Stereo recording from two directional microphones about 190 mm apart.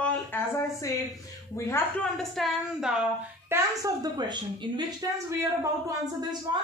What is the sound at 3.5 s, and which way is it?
A woman's voice, 20° right (ahead or behind).